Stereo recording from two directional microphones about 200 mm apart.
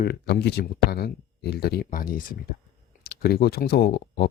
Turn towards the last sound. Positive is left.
turn(degrees=55)  # may be behind; listen again after turning